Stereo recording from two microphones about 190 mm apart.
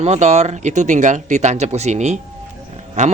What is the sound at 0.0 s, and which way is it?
Speech, 35° right (ahead or behind).